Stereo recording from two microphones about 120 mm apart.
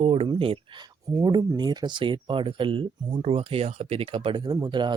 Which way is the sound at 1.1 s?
30° right (ahead or behind).